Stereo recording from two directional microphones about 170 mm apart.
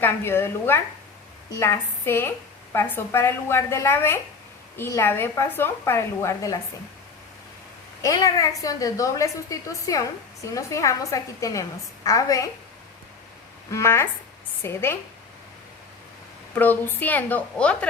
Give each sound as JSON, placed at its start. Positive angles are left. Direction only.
{"t": 0.0, "sound": "a woman's voice", "side_deg": 15}
{"t": 8.0, "sound": "a woman's voice", "side_deg": 20}
{"t": 13.7, "sound": "a woman's voice", "side_deg": 15}
{"t": 16.6, "sound": "a woman's voice", "side_deg": 10}